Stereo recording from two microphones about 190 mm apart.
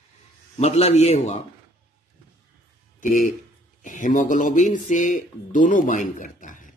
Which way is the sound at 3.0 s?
45° left (ahead or behind).